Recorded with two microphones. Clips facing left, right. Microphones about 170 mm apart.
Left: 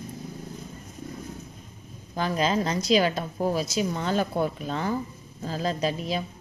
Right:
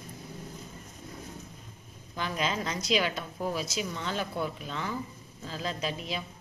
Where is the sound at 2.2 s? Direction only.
40° left (ahead or behind).